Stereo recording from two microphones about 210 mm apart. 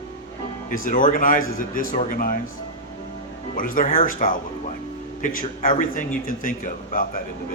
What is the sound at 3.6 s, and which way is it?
Speech, 40° left (ahead or behind).